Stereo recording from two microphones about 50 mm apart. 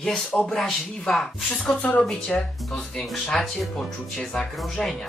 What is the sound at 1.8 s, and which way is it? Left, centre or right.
Speech, left.